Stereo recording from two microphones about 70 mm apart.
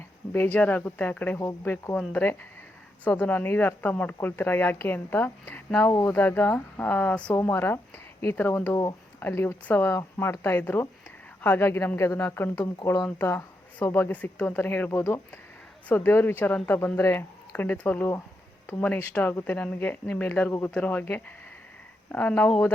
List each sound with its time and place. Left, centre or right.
0.3 s speech: left
3.0 s speech: left
5.9 s speech: left
6.1 s speech: left
7.3 s a woman's voice: left
10.2 s a woman's voice: left
15.9 s speech: left